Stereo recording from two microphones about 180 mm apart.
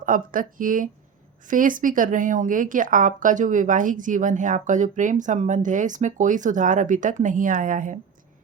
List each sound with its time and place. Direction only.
0.0 s speech: 50° right (ahead or behind)